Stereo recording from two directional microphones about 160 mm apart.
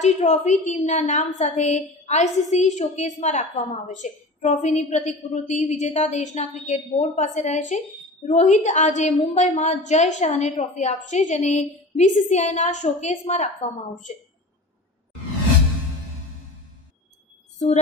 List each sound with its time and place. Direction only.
0.0 s a woman's voice: 45° left (ahead or behind)